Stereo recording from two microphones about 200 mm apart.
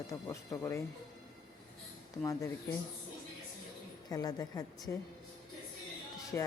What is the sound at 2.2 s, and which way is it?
Speech, 15° left (ahead or behind).